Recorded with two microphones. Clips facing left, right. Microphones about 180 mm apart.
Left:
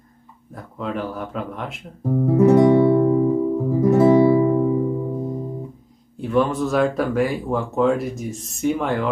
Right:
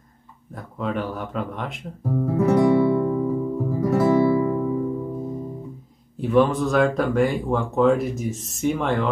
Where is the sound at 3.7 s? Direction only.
20° left (ahead or behind).